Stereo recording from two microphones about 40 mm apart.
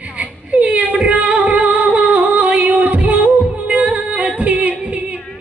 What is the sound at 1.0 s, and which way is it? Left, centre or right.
Music, right.